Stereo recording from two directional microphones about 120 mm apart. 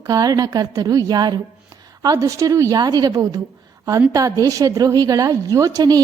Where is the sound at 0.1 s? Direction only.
30° right (ahead or behind).